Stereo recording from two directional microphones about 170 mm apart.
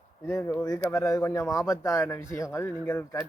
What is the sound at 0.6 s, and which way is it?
Speech, 20° left (ahead or behind).